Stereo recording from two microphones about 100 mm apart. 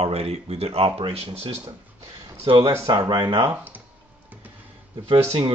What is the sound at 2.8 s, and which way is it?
Speech, 50° right (ahead or behind).